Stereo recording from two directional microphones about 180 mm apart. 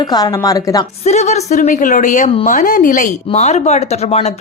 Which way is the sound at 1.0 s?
40° left (ahead or behind).